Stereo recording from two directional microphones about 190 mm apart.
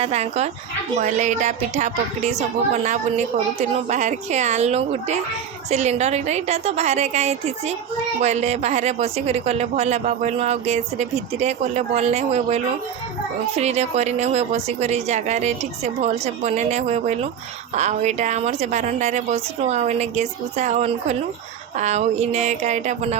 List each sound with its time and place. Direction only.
0.0 s speech: 35° right (ahead or behind)